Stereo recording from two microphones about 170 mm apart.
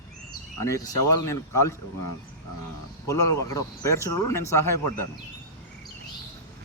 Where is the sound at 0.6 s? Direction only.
20° left (ahead or behind).